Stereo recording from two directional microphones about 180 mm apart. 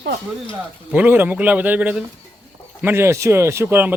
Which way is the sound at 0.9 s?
10° right (ahead or behind).